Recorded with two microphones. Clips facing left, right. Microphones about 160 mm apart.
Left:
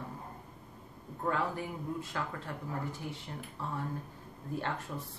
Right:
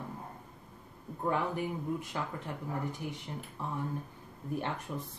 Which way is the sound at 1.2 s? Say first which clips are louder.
Right 2 dB; 15° right (ahead or behind).